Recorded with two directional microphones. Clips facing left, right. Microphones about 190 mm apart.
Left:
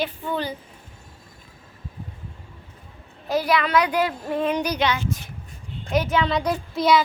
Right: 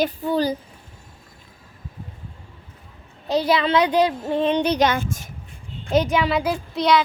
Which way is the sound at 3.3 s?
25° right (ahead or behind).